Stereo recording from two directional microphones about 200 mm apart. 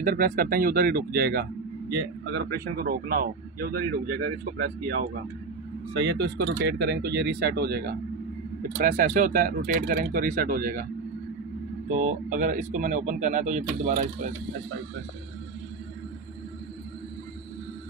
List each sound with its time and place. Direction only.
0.0 s speech: 45° right (ahead or behind)
8.7 s speech: 40° right (ahead or behind)
11.9 s speech: 40° right (ahead or behind)